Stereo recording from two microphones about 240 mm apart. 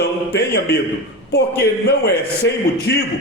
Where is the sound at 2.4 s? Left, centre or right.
Left.